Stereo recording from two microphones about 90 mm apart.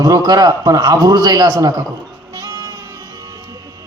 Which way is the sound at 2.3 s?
45° right (ahead or behind).